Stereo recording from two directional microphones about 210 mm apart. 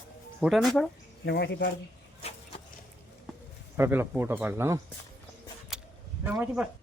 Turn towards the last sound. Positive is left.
turn(degrees=-5)  # may be behind; listen again after turning